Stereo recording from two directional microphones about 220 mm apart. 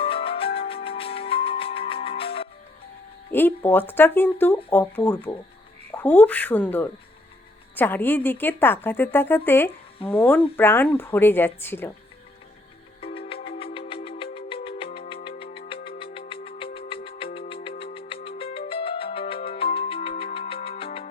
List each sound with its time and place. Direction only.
0.0 s music: 25° left (ahead or behind)
3.3 s speech: 10° left (ahead or behind)
10.0 s speech: 25° left (ahead or behind)
10.6 s speech: 10° left (ahead or behind)
13.0 s music: 25° left (ahead or behind)